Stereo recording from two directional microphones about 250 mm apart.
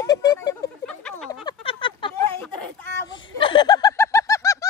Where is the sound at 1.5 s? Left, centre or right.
Left.